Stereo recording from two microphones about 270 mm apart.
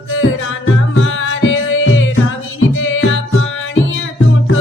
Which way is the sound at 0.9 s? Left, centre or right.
Left.